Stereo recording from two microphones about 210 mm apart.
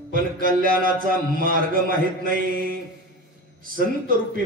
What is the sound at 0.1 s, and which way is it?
A man's voice, 40° right (ahead or behind).